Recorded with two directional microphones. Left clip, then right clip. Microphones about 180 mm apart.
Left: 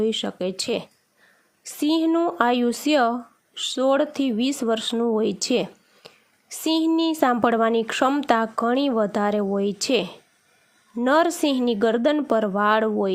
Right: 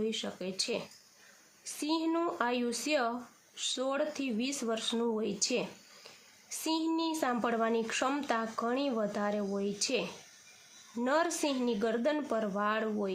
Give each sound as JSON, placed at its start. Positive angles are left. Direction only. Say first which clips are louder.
{"t": 0.0, "sound": "a woman's voice", "louder": "left 12 dB", "side_deg": 40}